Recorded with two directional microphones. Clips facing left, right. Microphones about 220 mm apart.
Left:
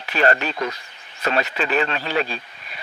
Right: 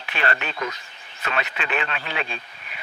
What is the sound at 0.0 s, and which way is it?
Speech, 40° left (ahead or behind).